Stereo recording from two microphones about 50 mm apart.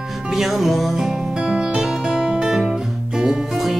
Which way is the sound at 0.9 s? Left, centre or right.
Centre.